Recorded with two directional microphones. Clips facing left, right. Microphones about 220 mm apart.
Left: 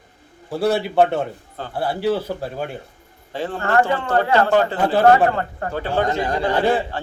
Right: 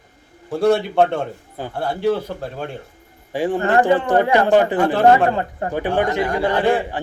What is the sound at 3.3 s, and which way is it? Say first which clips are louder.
Speech: right 3 dB; 15° right (ahead or behind).